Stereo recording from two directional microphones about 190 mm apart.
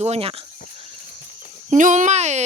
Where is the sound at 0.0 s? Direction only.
30° right (ahead or behind).